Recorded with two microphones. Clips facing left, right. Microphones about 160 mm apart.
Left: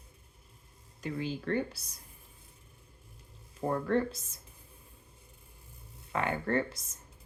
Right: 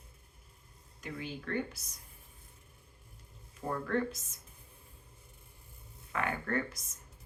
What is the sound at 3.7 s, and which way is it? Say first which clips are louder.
Speech: left 4 dB; 30° left (ahead or behind).